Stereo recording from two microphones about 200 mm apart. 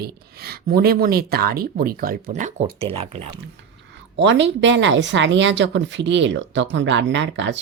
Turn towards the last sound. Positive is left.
turn(degrees=-65)  # may be behind; listen again after turning